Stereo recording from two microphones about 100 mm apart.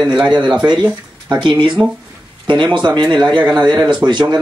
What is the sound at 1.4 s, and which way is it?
A man's voice, 50° right (ahead or behind).